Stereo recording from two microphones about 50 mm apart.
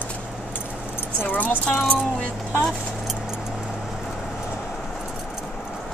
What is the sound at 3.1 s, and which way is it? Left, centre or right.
Keys jangling, centre.